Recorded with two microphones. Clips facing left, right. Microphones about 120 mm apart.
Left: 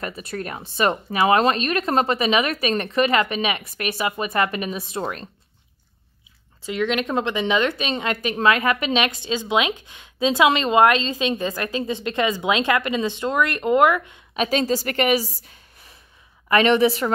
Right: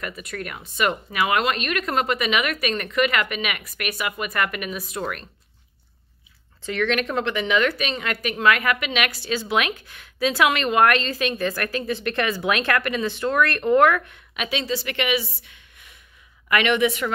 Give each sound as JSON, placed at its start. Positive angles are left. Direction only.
{"t": 0.0, "sound": "speech", "side_deg": 30}
{"t": 6.6, "sound": "a woman's voice", "side_deg": 15}
{"t": 14.3, "sound": "a woman's voice", "side_deg": 40}